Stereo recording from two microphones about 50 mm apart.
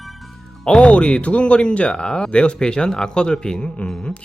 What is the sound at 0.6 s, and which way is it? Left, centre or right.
Speech, centre.